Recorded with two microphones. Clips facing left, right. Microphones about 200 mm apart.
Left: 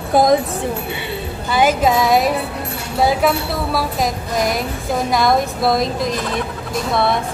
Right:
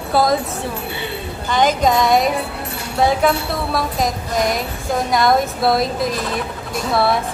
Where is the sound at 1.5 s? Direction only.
5° left (ahead or behind).